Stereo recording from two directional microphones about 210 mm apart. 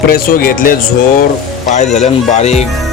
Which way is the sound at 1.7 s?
30° left (ahead or behind).